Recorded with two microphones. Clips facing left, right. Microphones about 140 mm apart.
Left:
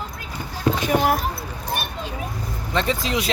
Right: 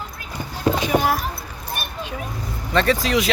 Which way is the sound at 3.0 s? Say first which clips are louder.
Right 4 dB; 20° left (ahead or behind).